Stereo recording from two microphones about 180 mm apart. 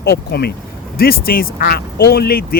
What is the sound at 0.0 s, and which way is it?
Speech, 65° left (ahead or behind).